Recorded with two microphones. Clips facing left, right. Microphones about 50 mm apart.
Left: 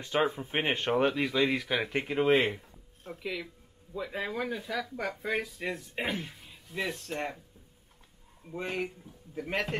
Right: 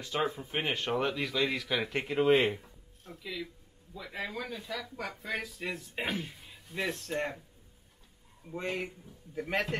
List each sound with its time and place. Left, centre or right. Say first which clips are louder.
0.0 s speech: left 4 dB; left; by 2.6 s centre
3.0 s a man's voice: left 3 dB; left
4.6 s speech: left 4 dB; centre
8.5 s speech: left 1 dB; centre